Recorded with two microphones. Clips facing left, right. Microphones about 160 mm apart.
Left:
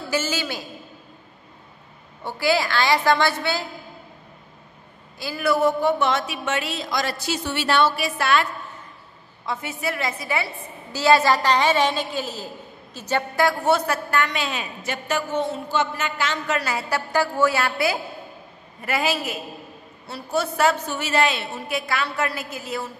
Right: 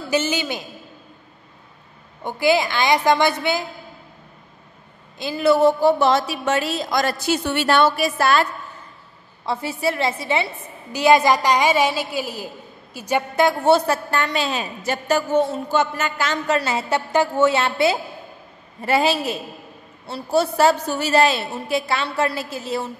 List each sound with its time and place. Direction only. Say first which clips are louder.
0.1 s a woman's voice: right 4 dB; 20° right (ahead or behind)
2.2 s a woman's voice: right 3 dB; 20° right (ahead or behind)
5.2 s a woman's voice: right 5 dB; 25° right (ahead or behind); by 8.5 s 40° right (ahead or behind)
9.5 s a woman's voice: right 5 dB; 30° right (ahead or behind)